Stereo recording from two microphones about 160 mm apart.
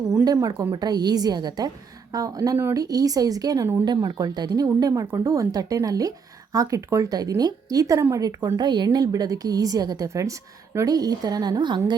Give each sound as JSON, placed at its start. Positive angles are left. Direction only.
{"t": 0.3, "sound": "speech", "side_deg": -25}